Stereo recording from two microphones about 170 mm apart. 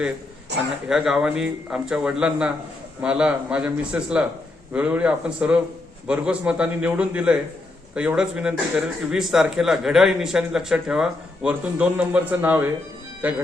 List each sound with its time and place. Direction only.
0.9 s a man's voice: 5° right (ahead or behind)